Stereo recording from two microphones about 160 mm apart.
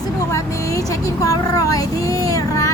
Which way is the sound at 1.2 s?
20° left (ahead or behind).